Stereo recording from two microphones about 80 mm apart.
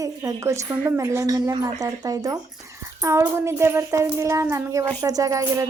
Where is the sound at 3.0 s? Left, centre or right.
Right.